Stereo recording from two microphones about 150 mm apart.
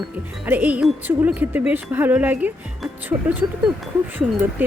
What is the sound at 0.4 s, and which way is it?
Speech, 10° right (ahead or behind).